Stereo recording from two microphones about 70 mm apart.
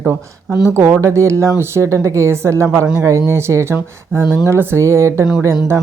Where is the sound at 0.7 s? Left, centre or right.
Right.